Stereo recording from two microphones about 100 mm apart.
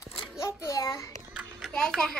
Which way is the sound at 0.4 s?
30° left (ahead or behind).